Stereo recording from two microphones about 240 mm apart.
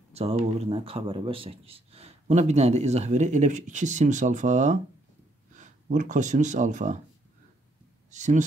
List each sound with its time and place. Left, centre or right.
0.1 s a man's voice: right
8.1 s speech: right